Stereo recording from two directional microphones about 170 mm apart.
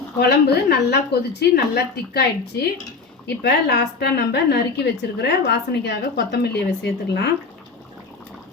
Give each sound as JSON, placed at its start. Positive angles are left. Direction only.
{"t": 0.2, "sound": "a woman's voice", "side_deg": 70}
{"t": 3.2, "sound": "a woman's voice", "side_deg": 85}